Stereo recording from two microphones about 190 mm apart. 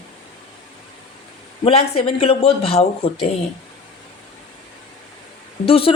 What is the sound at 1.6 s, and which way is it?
Speech, 30° left (ahead or behind).